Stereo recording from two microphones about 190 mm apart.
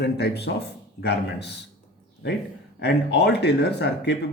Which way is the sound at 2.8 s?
65° left (ahead or behind).